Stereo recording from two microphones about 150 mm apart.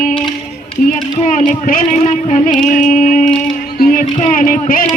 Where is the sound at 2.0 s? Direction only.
55° left (ahead or behind).